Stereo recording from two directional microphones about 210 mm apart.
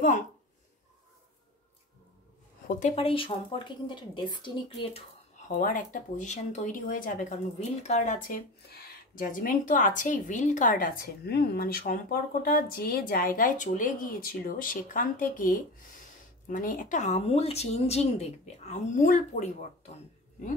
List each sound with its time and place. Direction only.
2.7 s speech: 30° left (ahead or behind)
5.5 s speech: 40° left (ahead or behind)